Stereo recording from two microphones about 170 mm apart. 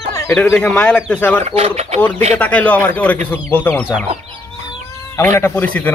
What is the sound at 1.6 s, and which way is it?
Speech, 40° right (ahead or behind).